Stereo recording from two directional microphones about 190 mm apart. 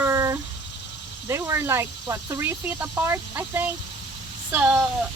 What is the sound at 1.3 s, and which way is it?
Speech, 15° right (ahead or behind).